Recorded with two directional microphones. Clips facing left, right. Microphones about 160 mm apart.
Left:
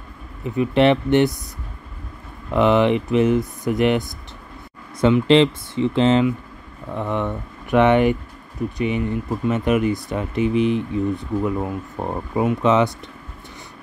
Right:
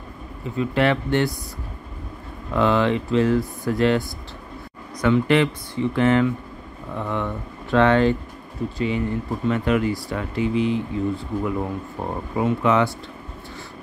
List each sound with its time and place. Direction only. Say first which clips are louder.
0.4 s speech: left 4 dB; 20° left (ahead or behind)
2.5 s speech: left 3 dB; 20° left (ahead or behind)